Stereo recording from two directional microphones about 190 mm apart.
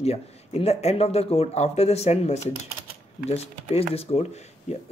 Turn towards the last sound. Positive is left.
turn(degrees=35)  # may be behind; listen again after turning